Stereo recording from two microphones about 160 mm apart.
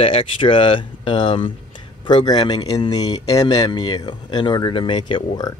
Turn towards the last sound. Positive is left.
turn(degrees=30)  # may be behind; listen again after turning